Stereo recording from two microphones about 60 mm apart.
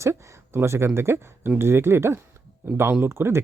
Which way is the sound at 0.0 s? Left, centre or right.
Right.